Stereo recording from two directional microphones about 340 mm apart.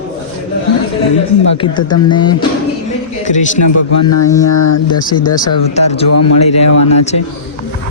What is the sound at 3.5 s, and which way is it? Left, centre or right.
Speech, left.